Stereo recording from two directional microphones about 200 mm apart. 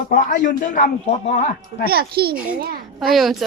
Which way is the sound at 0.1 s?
40° left (ahead or behind).